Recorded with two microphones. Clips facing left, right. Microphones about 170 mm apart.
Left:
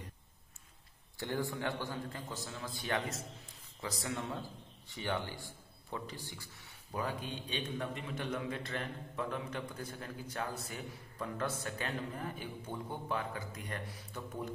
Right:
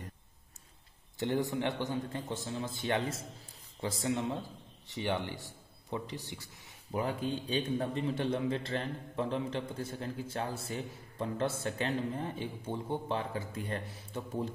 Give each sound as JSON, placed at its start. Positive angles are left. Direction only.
{"t": 1.1, "sound": "a man's voice", "side_deg": -20}